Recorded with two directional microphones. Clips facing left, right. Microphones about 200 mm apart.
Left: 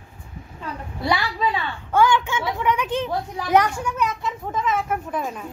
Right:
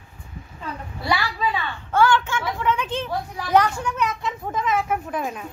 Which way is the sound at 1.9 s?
15° left (ahead or behind).